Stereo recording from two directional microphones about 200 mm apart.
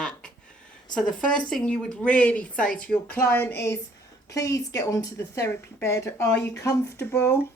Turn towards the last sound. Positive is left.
turn(degrees=10)  # may be behind; listen again after turning